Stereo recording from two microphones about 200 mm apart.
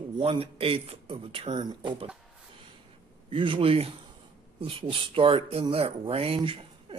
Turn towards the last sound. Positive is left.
turn(degrees=-25)  # may be behind; listen again after turning